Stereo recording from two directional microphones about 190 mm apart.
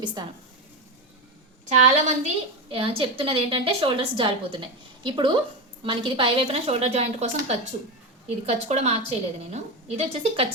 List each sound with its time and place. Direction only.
0.0 s a woman's voice: 25° right (ahead or behind)
1.7 s a woman's voice: 40° right (ahead or behind)